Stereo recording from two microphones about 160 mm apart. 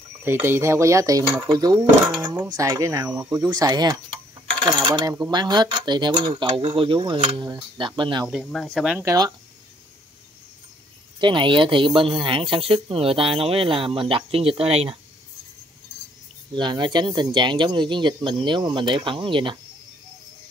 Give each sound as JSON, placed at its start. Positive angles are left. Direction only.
{"t": 0.2, "sound": "speech", "side_deg": -15}
{"t": 2.5, "sound": "speech", "side_deg": -20}
{"t": 4.6, "sound": "coin", "side_deg": -30}
{"t": 4.8, "sound": "speech", "side_deg": -25}
{"t": 8.3, "sound": "speech", "side_deg": 0}
{"t": 9.0, "sound": "speech", "side_deg": -25}
{"t": 11.1, "sound": "speech", "side_deg": -30}
{"t": 16.5, "sound": "speech", "side_deg": -30}